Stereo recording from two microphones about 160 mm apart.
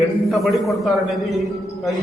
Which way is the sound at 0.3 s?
Centre (ahead or behind).